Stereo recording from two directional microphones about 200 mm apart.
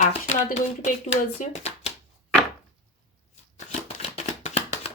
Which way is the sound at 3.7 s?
30° left (ahead or behind).